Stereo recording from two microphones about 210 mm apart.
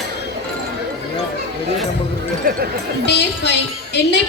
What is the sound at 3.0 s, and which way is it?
Speech, 55° left (ahead or behind).